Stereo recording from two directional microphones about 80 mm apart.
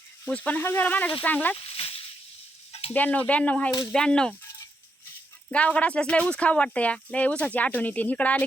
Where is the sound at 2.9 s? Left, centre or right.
Centre.